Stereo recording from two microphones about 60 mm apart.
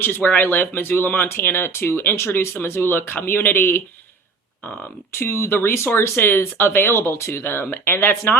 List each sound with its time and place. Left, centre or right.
0.0 s speech: left
5.1 s speech: left